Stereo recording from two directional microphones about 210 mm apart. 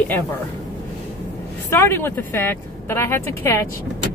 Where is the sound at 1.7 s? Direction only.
10° left (ahead or behind).